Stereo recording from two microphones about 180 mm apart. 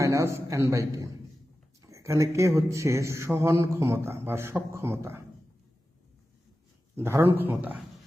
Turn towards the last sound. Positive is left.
turn(degrees=-10)  # may be behind; listen again after turning